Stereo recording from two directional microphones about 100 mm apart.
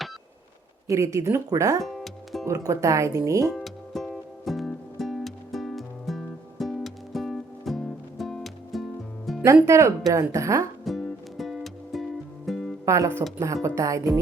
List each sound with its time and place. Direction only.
0.9 s speech: 30° right (ahead or behind)
1.8 s music: centre (ahead or behind)
2.5 s speech: 35° right (ahead or behind)
3.5 s music: centre (ahead or behind)
9.6 s speech: 30° right (ahead or behind)
10.8 s music: centre (ahead or behind)
12.8 s music: 30° right (ahead or behind)
13.4 s speech: 35° right (ahead or behind)